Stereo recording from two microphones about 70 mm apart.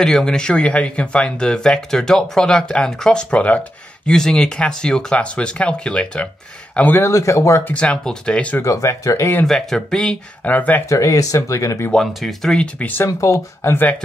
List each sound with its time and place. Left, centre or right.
0.0 s speech: centre
4.1 s speech: centre
7.0 s speech: left
7.7 s speech: centre
8.6 s speech: left
9.5 s speech: centre
10.4 s speech: left
10.9 s speech: left
11.9 s speech: centre
12.5 s speech: left
13.0 s speech: left